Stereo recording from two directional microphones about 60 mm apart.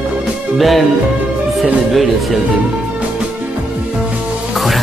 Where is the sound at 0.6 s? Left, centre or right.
Centre.